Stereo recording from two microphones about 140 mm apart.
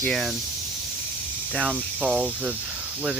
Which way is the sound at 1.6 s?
10° right (ahead or behind).